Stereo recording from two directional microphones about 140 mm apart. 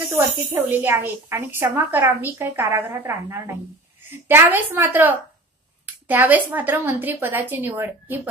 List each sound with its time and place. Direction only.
0.1 s a woman's voice: 15° right (ahead or behind)